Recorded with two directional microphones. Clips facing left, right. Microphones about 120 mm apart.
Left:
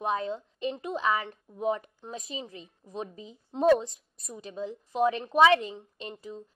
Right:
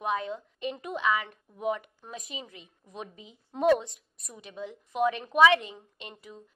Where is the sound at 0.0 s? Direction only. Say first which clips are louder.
Left 1 dB; 30° left (ahead or behind).